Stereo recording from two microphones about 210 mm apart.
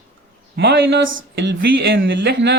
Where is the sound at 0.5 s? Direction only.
50° right (ahead or behind).